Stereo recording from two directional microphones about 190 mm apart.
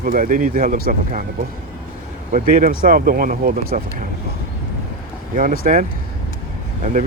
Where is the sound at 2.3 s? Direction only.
50° right (ahead or behind).